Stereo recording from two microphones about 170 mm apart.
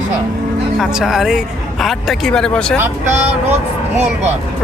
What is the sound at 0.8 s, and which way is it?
Speech, 5° right (ahead or behind).